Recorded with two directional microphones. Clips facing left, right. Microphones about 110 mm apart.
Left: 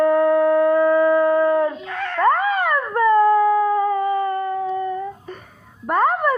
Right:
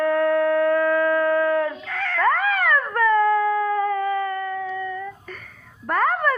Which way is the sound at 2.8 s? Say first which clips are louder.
Left 6 dB; 25° left (ahead or behind).